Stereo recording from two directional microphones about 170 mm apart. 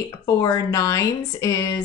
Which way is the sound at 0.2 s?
20° left (ahead or behind).